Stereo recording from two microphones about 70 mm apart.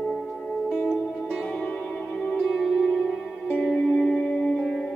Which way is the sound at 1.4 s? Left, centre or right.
Centre.